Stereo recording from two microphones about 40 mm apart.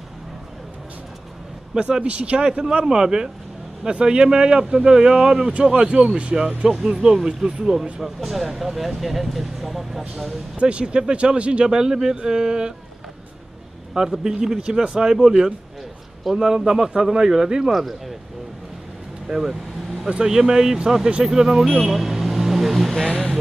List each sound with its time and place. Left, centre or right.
1.8 s a man's voice: right; by 10.0 s centre
10.6 s speech: right
13.9 s a man's voice: centre
17.6 s speech: centre
19.2 s a man's voice: centre